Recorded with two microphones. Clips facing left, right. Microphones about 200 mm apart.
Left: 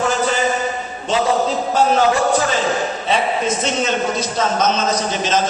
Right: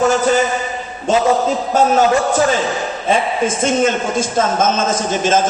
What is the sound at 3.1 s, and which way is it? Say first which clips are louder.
A man's voice: right 3 dB; 50° right (ahead or behind).